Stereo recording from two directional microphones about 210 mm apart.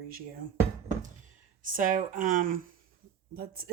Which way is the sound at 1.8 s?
40° right (ahead or behind).